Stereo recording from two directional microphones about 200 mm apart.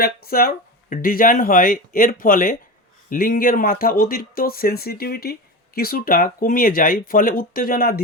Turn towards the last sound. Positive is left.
turn(degrees=50)  # may be behind; listen again after turning